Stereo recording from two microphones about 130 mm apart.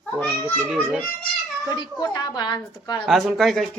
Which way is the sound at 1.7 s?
35° left (ahead or behind).